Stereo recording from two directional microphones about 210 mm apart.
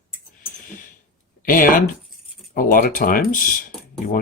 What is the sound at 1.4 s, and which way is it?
Speech, 40° left (ahead or behind).